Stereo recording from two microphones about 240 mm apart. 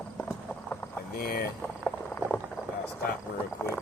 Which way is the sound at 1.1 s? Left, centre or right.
Left.